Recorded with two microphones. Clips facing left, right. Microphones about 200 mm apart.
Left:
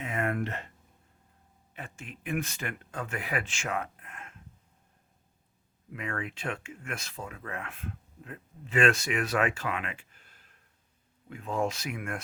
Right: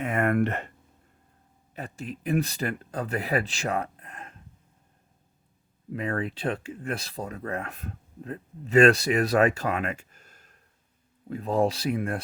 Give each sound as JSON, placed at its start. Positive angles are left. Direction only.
{"t": 0.0, "sound": "speech", "side_deg": -60}
{"t": 1.7, "sound": "speech", "side_deg": -40}
{"t": 5.9, "sound": "speech", "side_deg": -35}